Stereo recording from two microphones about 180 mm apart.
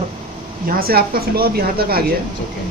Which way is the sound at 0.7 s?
55° right (ahead or behind).